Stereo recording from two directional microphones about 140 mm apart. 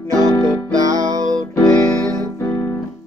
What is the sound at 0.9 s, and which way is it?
Music, 25° right (ahead or behind).